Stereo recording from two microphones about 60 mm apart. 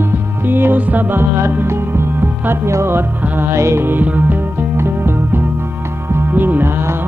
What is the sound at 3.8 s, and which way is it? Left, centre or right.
Music, right.